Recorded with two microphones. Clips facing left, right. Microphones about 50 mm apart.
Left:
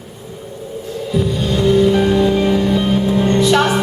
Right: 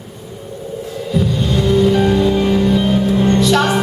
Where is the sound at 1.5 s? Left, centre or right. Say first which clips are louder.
Left 1 dB; left.